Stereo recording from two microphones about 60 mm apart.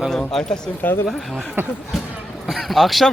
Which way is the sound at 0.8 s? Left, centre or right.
Left.